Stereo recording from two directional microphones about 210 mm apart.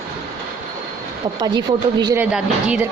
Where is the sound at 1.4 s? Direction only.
20° right (ahead or behind).